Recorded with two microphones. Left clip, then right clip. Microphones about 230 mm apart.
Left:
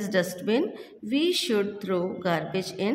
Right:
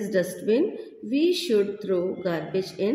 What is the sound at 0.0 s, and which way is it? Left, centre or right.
A woman's voice, left.